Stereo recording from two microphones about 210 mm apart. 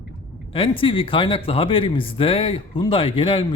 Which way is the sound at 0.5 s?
25° left (ahead or behind).